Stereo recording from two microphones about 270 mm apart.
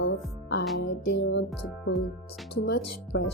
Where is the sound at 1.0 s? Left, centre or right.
Left.